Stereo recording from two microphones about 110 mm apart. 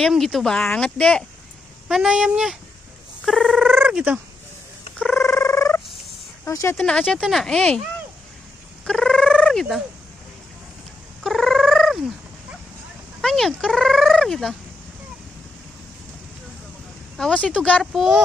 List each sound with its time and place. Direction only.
0.1 s speech: centre (ahead or behind)
1.9 s speech: 5° right (ahead or behind)
3.3 s a sound: centre (ahead or behind)
3.7 s cat: 15° right (ahead or behind)
5.4 s frog: 25° left (ahead or behind)
6.4 s speech: 30° left (ahead or behind)
6.8 s speech: 10° left (ahead or behind)
8.8 s cat: 5° left (ahead or behind)
11.2 s cat: 5° left (ahead or behind)
13.2 s speech: 5° left (ahead or behind)
17.2 s speech: 10° left (ahead or behind)